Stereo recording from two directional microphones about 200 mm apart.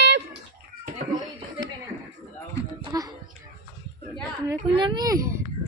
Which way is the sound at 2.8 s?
15° right (ahead or behind).